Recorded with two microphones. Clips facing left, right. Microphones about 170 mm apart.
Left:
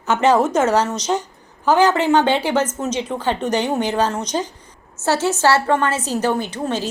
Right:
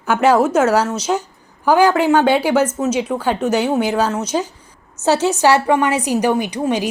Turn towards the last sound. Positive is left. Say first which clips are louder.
# right 4 dB
turn(degrees=-15)  # may be behind; listen again after turning